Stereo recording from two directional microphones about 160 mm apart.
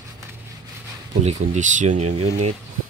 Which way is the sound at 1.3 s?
50° right (ahead or behind).